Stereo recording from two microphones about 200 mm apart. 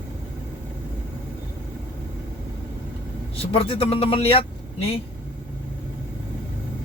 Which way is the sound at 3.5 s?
30° left (ahead or behind).